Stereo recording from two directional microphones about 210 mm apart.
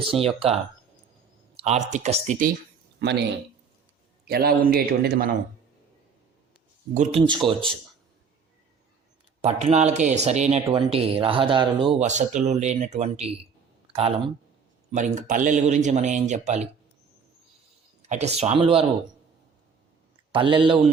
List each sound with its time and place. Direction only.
0.1 s speech: 25° right (ahead or behind)
3.0 s a man's voice: 55° right (ahead or behind)
4.3 s a man's voice: 45° right (ahead or behind)
6.9 s speech: 30° right (ahead or behind)
9.4 s speech: 30° right (ahead or behind)
13.8 s a sound: 25° right (ahead or behind)
14.9 s speech: 35° right (ahead or behind)
18.1 s speech: 30° right (ahead or behind)
20.3 s speech: 25° right (ahead or behind)